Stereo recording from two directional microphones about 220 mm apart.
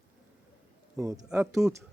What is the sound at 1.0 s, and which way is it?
Speech, 15° right (ahead or behind).